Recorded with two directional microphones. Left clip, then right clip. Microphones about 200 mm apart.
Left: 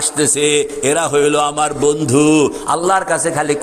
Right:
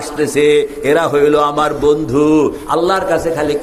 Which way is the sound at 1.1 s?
90° left.